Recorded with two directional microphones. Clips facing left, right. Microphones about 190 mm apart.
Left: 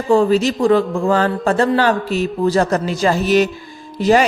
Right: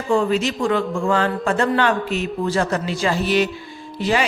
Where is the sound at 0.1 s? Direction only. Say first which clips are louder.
Left 5 dB; 35° left (ahead or behind).